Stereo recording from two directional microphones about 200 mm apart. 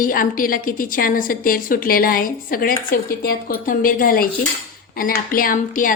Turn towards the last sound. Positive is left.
turn(degrees=40)  # may be behind; listen again after turning